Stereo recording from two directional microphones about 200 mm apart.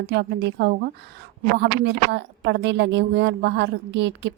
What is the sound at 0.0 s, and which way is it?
A woman's voice, 55° right (ahead or behind).